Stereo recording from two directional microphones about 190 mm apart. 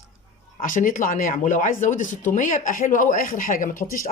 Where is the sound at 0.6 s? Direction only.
45° left (ahead or behind).